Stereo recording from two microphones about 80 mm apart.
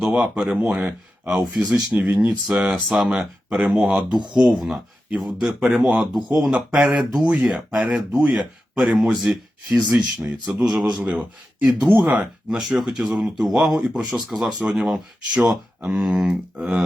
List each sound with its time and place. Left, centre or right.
0.0 s speech: centre
11.0 s speech: centre